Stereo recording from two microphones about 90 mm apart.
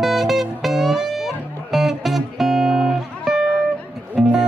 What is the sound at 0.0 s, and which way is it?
Music, 5° right (ahead or behind).